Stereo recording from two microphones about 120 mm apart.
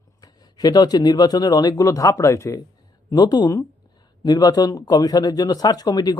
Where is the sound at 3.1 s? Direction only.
35° left (ahead or behind).